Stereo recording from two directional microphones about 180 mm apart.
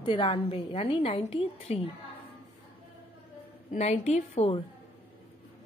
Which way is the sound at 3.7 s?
40° left (ahead or behind).